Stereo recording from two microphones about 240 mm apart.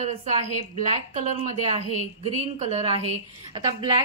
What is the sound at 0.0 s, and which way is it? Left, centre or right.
A woman's voice, right.